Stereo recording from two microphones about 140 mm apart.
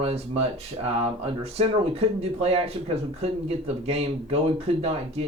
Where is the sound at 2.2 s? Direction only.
50° right (ahead or behind).